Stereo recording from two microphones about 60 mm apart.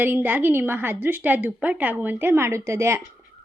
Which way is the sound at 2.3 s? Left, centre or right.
Right.